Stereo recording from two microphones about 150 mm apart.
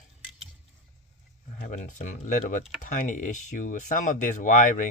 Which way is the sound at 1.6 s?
55° left (ahead or behind).